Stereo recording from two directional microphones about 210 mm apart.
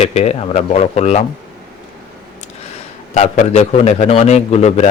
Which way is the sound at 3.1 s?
35° left (ahead or behind).